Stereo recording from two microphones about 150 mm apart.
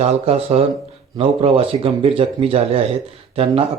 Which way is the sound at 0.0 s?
45° right (ahead or behind).